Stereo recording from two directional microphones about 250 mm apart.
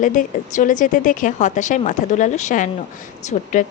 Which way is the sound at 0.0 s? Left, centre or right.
Left.